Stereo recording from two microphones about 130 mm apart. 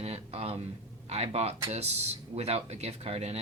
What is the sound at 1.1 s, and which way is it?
Speech, 55° right (ahead or behind).